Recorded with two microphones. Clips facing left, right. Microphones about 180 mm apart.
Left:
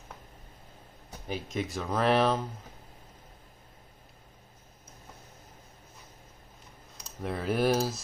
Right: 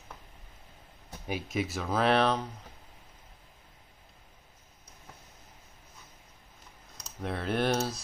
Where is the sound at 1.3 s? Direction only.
5° right (ahead or behind).